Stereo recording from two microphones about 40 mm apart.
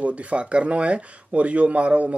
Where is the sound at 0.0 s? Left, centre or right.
Right.